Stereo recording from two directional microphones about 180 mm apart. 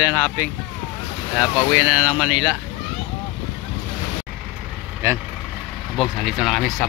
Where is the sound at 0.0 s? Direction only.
10° right (ahead or behind).